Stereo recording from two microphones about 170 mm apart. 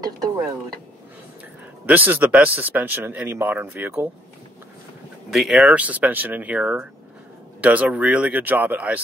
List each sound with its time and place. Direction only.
1.9 s speech: 10° right (ahead or behind)
5.3 s speech: centre (ahead or behind)